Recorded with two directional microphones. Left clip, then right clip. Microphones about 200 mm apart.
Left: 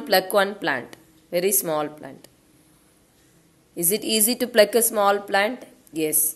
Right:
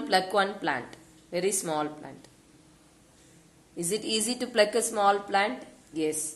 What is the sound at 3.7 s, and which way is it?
A woman's voice, 45° left (ahead or behind).